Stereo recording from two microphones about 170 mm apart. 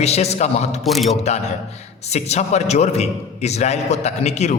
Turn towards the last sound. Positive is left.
turn(degrees=40)  # may be behind; listen again after turning